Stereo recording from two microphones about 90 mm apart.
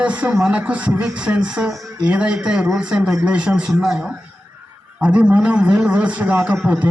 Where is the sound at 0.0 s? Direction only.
15° right (ahead or behind).